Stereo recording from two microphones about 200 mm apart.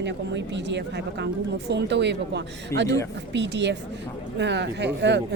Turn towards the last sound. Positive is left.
turn(degrees=-60)  # may be behind; listen again after turning